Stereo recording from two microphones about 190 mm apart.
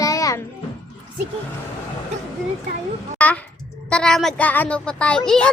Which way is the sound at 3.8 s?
5° left (ahead or behind).